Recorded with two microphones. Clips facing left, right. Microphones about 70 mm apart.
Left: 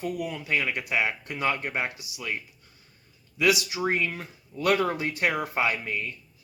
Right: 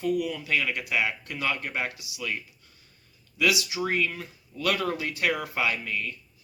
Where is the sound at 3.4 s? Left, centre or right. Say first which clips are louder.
Left 2 dB; left.